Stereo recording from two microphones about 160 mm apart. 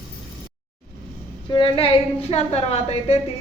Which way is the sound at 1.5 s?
35° left (ahead or behind).